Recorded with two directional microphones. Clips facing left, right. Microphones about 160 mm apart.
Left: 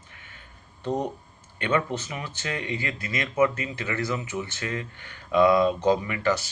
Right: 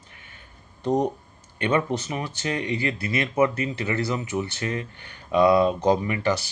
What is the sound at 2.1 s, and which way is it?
Speech, 30° right (ahead or behind).